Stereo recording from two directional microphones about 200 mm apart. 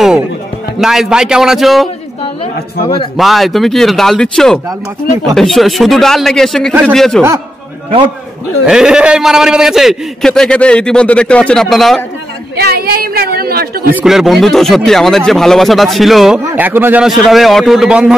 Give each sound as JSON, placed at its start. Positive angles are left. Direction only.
{"t": 0.7, "sound": "a man's voice", "side_deg": 0}
{"t": 3.2, "sound": "a man's voice", "side_deg": 0}
{"t": 8.6, "sound": "a man's voice", "side_deg": -5}
{"t": 12.5, "sound": "a woman's voice", "side_deg": -50}
{"t": 13.9, "sound": "a man's voice", "side_deg": 0}